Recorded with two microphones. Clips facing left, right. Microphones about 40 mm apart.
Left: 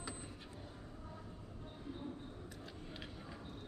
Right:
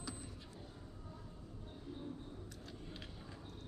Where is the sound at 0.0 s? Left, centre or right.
Left.